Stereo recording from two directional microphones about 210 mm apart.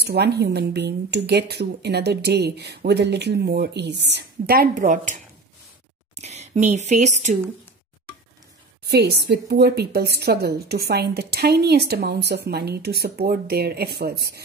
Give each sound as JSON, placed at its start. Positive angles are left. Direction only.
{"t": 0.0, "sound": "a woman's voice", "side_deg": -50}
{"t": 8.8, "sound": "a woman's voice", "side_deg": -50}